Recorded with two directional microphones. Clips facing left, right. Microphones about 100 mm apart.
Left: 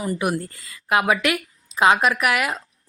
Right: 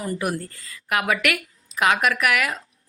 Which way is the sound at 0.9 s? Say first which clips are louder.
Left 3 dB; 25° left (ahead or behind).